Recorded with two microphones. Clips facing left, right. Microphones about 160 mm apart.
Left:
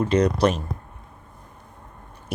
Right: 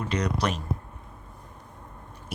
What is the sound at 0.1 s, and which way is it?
Speech, 30° left (ahead or behind).